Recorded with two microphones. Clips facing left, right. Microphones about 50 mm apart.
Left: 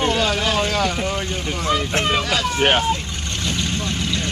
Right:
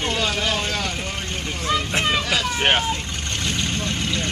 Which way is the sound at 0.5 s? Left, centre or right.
Left.